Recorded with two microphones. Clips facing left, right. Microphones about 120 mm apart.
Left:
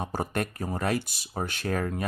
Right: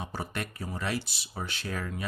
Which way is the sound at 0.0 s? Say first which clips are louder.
Left 6 dB; 45° left (ahead or behind).